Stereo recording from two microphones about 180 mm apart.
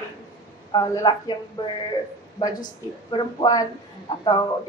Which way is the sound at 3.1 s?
25° left (ahead or behind).